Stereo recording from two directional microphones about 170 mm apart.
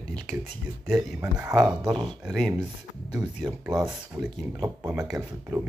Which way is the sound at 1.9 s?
25° right (ahead or behind).